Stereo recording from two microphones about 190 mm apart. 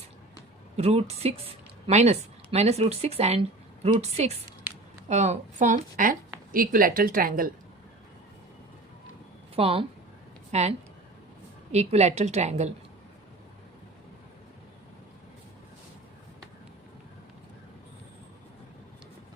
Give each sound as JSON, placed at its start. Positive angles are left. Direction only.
{"t": 0.8, "sound": "a woman's voice", "side_deg": -35}
{"t": 9.6, "sound": "speech", "side_deg": -30}